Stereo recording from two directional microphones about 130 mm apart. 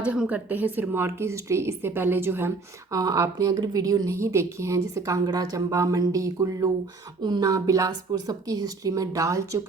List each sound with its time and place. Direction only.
0.0 s a woman's voice: 10° right (ahead or behind); by 9.4 s 25° right (ahead or behind)